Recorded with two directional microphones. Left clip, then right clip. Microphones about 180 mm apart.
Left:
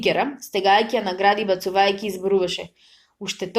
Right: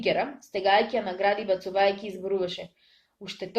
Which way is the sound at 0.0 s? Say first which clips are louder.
Left 5 dB; 40° left (ahead or behind).